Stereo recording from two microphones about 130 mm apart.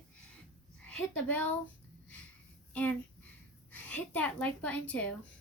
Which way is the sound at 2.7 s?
10° left (ahead or behind).